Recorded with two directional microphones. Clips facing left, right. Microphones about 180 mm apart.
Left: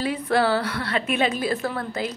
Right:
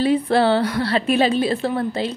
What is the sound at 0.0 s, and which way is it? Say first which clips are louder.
A woman's voice: right 5 dB; 30° right (ahead or behind).